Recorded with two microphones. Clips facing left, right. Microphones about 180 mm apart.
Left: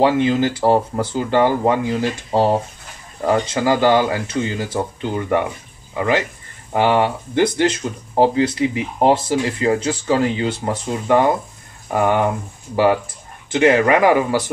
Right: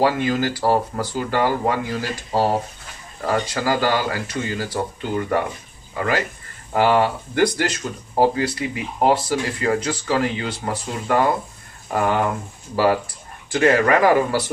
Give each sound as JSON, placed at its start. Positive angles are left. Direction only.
{"t": 0.0, "sound": "speech", "side_deg": 20}
{"t": 13.5, "sound": "speech", "side_deg": 20}